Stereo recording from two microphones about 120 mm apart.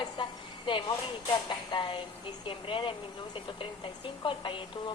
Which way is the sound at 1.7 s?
40° left (ahead or behind).